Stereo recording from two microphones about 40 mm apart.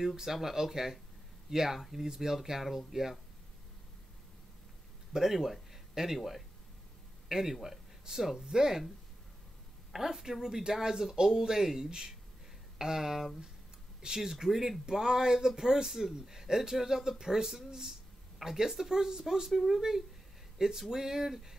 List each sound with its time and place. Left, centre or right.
0.0 s speech: centre
5.1 s speech: centre
9.9 s speech: centre